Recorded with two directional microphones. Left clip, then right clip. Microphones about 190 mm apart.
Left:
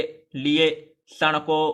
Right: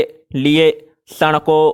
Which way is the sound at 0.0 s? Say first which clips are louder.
Right 9 dB; 50° right (ahead or behind).